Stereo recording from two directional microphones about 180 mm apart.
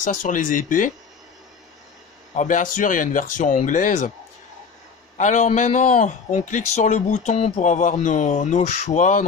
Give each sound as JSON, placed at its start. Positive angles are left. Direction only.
{"t": 0.0, "sound": "a man's voice", "side_deg": 45}
{"t": 2.3, "sound": "a man's voice", "side_deg": 45}
{"t": 5.1, "sound": "a man's voice", "side_deg": 40}